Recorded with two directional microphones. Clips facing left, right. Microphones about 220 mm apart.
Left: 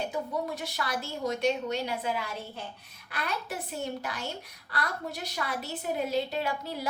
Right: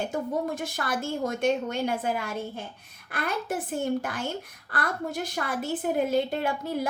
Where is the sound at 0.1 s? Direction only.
50° right (ahead or behind).